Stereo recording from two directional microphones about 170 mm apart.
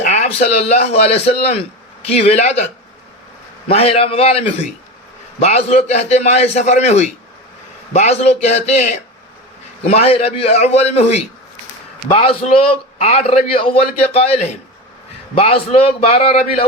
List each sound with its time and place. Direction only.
0.0 s a man's voice: 40° left (ahead or behind)
3.7 s a man's voice: 35° left (ahead or behind)